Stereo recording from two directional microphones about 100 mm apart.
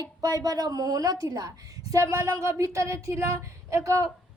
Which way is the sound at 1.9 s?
30° right (ahead or behind).